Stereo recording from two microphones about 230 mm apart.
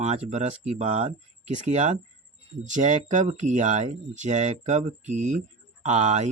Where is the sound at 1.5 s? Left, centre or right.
Right.